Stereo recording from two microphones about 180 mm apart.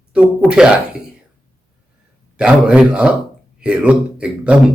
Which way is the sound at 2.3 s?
5° right (ahead or behind).